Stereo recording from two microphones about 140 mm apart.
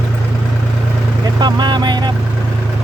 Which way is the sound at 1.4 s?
30° right (ahead or behind).